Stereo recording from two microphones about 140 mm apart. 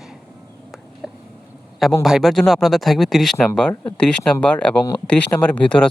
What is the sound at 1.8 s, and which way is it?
Speech, centre (ahead or behind).